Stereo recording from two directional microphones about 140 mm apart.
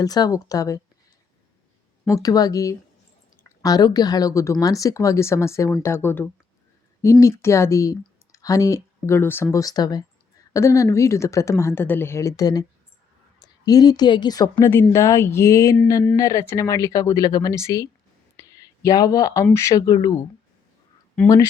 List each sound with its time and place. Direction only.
0.0 s speech: 25° left (ahead or behind)
2.0 s a woman's voice: 25° left (ahead or behind)
18.3 s a sound: 25° left (ahead or behind)
19.5 s speech: 20° left (ahead or behind)